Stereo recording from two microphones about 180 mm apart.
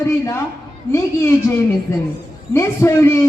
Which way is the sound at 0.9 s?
15° left (ahead or behind).